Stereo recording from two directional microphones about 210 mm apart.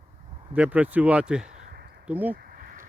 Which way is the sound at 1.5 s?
40° right (ahead or behind).